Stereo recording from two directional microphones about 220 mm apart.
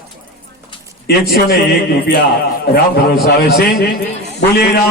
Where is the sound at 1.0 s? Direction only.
45° left (ahead or behind).